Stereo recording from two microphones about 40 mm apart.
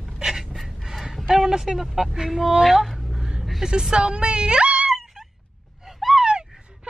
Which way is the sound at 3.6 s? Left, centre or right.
Centre.